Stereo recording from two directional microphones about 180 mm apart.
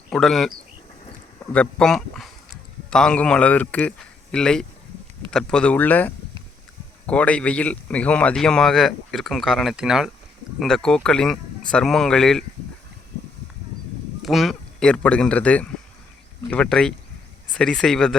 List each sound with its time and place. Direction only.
0.1 s speech: centre (ahead or behind)
1.5 s speech: 5° left (ahead or behind)
14.2 s speech: centre (ahead or behind)